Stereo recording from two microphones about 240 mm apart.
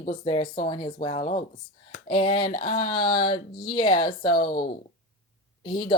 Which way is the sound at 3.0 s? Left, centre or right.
Left.